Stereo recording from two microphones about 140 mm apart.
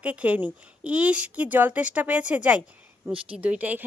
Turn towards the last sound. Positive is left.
turn(degrees=-10)  # may be behind; listen again after turning